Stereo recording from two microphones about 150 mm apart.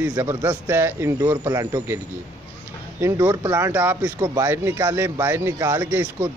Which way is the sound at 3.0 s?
15° right (ahead or behind).